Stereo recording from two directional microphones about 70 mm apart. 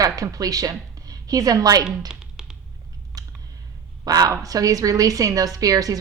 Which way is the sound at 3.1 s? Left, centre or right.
Right.